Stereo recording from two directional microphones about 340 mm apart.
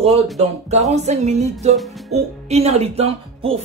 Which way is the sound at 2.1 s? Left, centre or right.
Centre.